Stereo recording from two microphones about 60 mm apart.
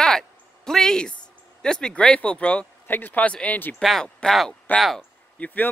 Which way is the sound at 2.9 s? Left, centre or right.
Left.